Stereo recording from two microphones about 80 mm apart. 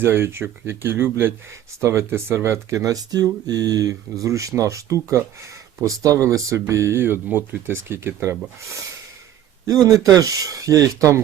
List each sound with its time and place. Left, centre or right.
0.0 s speech: right
10.0 s speech: right